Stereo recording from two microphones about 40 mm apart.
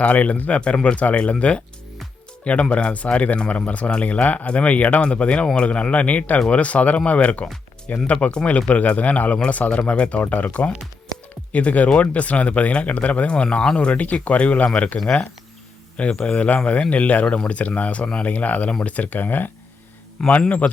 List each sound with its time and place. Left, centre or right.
0.0 s speech: left
8.7 s speech: left
14.9 s speech: centre; by 19.5 s left
20.2 s a man's voice: centre